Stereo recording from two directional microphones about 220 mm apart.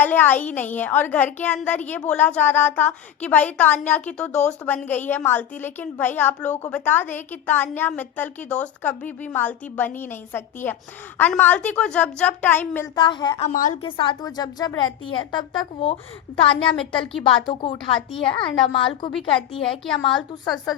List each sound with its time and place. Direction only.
0.0 s a woman's voice: 10° left (ahead or behind)
13.0 s a woman's voice: 20° left (ahead or behind)
13.5 s a woman's voice: 35° left (ahead or behind)
13.8 s a woman's voice: 20° left (ahead or behind)
19.8 s a woman's voice: centre (ahead or behind)
20.4 s a woman's voice: 20° left (ahead or behind)